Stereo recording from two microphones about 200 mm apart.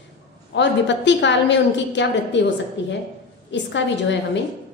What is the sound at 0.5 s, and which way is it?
A woman's voice, 60° left (ahead or behind).